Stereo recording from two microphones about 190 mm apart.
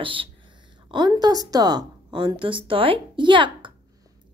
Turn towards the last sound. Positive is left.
turn(degrees=-25)  # may be behind; listen again after turning